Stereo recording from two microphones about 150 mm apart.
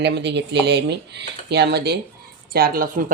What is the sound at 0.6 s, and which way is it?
A woman's voice, 90° right.